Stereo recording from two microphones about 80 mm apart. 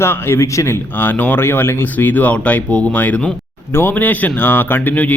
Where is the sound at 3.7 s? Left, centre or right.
Left.